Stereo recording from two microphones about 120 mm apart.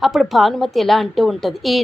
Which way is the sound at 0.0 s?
Centre (ahead or behind).